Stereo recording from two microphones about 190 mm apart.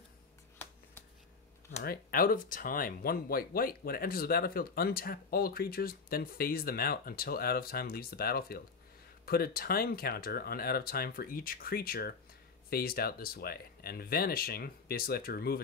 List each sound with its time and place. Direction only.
1.8 s speech: 50° left (ahead or behind)